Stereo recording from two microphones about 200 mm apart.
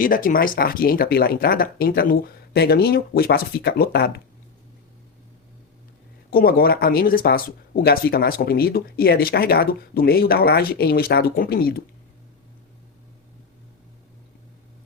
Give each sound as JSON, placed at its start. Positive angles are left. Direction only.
{"t": 0.0, "sound": "speech", "side_deg": 45}
{"t": 6.3, "sound": "speech", "side_deg": 50}